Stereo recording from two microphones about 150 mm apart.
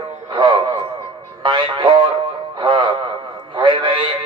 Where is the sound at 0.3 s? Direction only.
35° right (ahead or behind).